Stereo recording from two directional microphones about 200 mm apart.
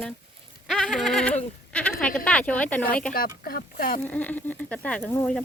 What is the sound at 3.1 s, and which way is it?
Speech, 45° left (ahead or behind).